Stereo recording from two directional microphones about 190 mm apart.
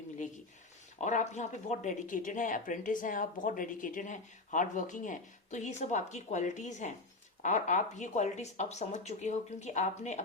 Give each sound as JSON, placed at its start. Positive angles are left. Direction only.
{"t": 1.0, "sound": "speech", "side_deg": 40}